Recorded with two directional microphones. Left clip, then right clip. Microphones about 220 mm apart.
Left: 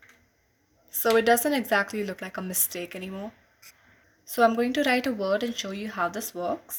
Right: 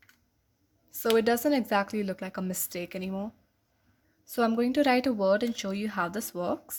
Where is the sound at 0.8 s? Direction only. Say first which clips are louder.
Left 4 dB; 25° right (ahead or behind).